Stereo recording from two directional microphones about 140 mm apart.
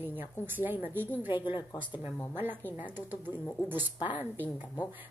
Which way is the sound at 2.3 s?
15° right (ahead or behind).